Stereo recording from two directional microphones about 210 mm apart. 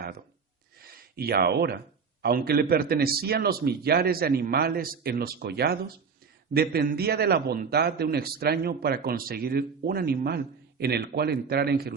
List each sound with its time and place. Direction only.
0.8 s a man's voice: 45° right (ahead or behind)